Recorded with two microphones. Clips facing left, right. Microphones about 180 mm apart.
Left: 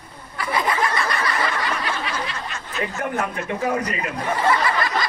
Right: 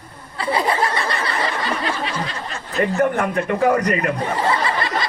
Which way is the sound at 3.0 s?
60° right (ahead or behind).